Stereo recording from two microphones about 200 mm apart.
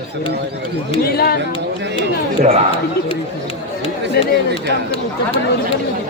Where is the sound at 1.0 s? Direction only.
50° left (ahead or behind).